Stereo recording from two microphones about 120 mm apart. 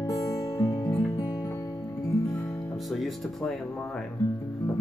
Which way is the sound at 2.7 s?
Centre (ahead or behind).